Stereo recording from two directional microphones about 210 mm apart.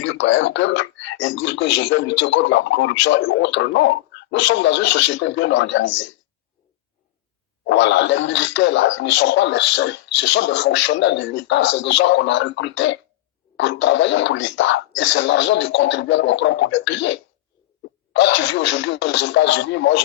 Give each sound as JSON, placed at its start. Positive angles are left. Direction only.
{"t": 0.0, "sound": "speech", "side_deg": 65}
{"t": 7.7, "sound": "speech", "side_deg": 55}
{"t": 18.2, "sound": "speech", "side_deg": 60}